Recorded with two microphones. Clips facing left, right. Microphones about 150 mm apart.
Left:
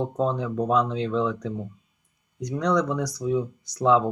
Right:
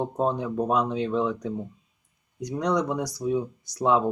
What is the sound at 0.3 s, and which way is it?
Speech, 15° right (ahead or behind).